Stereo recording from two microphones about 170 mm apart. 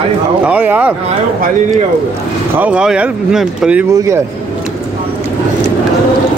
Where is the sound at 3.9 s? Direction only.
15° right (ahead or behind).